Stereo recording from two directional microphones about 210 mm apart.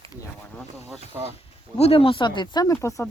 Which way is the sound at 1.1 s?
10° right (ahead or behind).